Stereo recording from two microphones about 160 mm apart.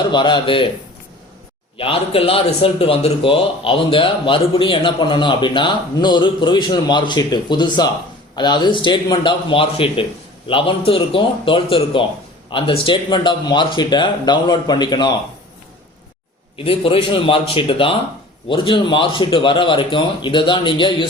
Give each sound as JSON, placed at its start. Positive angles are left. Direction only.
{"t": 0.0, "sound": "speech", "side_deg": 30}
{"t": 1.8, "sound": "a man's voice", "side_deg": 35}
{"t": 16.6, "sound": "a man's voice", "side_deg": 35}